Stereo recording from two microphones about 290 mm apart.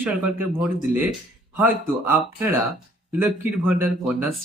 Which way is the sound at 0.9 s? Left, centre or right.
Right.